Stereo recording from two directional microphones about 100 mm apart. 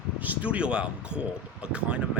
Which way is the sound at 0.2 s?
15° right (ahead or behind).